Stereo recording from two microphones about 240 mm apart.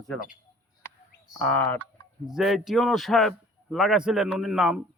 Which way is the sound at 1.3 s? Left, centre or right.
Centre.